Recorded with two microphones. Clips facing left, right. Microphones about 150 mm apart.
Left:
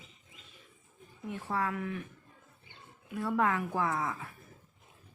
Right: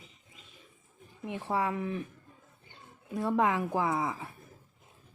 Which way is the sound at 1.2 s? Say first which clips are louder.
Right 3 dB; 15° right (ahead or behind).